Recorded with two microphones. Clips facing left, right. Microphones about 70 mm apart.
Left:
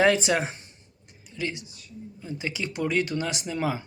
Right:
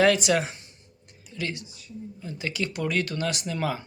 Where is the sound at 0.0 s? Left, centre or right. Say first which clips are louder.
Right 1 dB; left.